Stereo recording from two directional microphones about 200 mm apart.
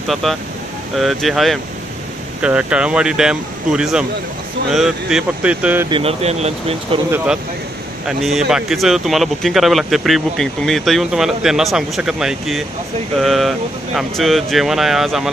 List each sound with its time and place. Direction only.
0.1 s speech: centre (ahead or behind)
5.9 s speech: 25° right (ahead or behind)
8.2 s speech: centre (ahead or behind)